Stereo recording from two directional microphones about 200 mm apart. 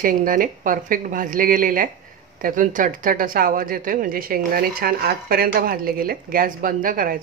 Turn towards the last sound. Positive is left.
turn(degrees=-45)  # may be behind; listen again after turning